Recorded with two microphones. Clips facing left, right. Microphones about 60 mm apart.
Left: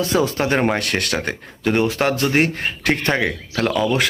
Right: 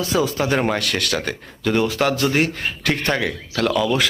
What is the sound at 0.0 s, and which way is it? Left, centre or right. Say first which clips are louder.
Speech: left 1 dB; left.